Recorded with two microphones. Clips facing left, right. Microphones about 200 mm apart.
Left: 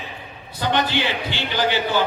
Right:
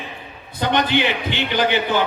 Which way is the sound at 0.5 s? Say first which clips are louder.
Right 3 dB; 20° right (ahead or behind).